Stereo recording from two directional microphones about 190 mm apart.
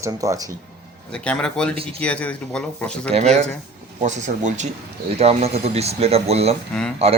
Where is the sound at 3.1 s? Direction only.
35° right (ahead or behind).